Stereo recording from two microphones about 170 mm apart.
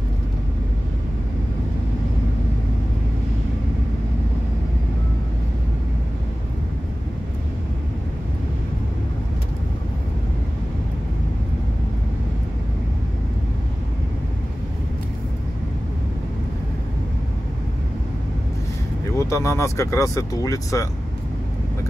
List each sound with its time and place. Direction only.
19.1 s speech: 15° left (ahead or behind)